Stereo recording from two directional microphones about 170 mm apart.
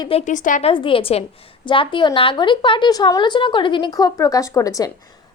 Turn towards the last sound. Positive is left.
turn(degrees=20)  # may be behind; listen again after turning